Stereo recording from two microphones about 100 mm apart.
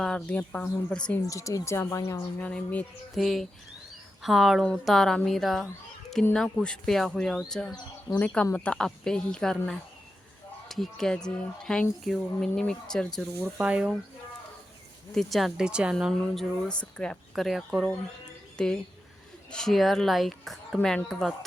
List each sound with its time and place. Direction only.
0.0 s a woman's voice: 10° left (ahead or behind)
1.3 s speech: 35° left (ahead or behind)
2.4 s a woman's voice: 15° left (ahead or behind)
3.2 s a woman's voice: centre (ahead or behind)
13.4 s speech: 10° right (ahead or behind)
15.1 s speech: centre (ahead or behind)